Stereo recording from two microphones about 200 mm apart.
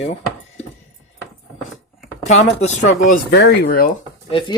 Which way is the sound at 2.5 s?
35° left (ahead or behind).